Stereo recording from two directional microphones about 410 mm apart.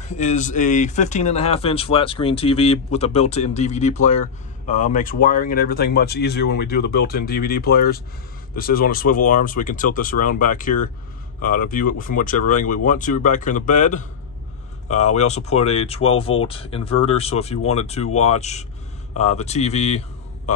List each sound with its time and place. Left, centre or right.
0.1 s a man's voice: centre